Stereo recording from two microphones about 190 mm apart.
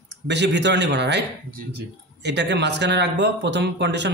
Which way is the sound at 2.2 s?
65° right (ahead or behind).